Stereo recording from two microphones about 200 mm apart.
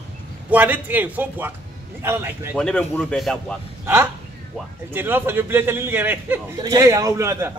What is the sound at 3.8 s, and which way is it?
A man's voice, 10° right (ahead or behind).